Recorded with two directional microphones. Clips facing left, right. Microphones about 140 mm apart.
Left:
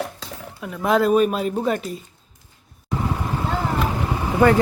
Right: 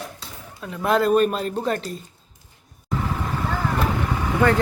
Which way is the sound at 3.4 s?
20° left (ahead or behind).